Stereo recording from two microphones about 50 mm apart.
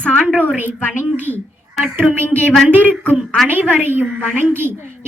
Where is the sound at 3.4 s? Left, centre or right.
Right.